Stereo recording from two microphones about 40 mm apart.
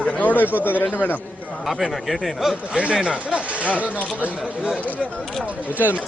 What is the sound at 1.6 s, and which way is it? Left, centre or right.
Speech, centre.